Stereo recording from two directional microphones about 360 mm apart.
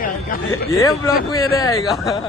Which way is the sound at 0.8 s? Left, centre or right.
Centre.